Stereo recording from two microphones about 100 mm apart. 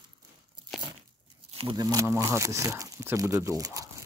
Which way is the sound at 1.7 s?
35° right (ahead or behind).